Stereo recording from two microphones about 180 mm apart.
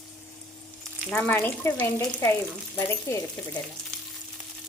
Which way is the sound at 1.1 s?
5° left (ahead or behind).